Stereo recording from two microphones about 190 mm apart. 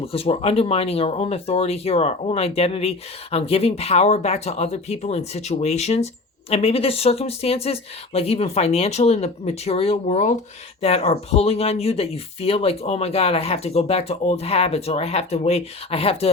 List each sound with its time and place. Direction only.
0.0 s speech: 30° left (ahead or behind)